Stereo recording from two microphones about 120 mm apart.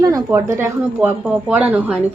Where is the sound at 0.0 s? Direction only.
25° right (ahead or behind).